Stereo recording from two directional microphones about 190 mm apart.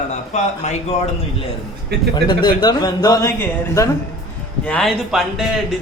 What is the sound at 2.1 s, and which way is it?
A woman's voice, 25° left (ahead or behind).